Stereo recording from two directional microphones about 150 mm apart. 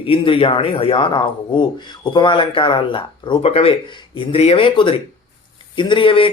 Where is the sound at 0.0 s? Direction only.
35° left (ahead or behind).